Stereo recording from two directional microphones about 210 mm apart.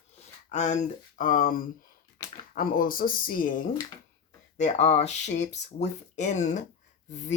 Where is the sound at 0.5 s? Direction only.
35° left (ahead or behind).